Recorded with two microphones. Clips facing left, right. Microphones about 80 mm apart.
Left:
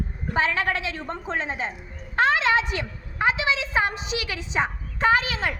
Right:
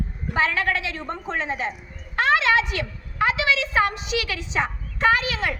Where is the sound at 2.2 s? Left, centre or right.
Left.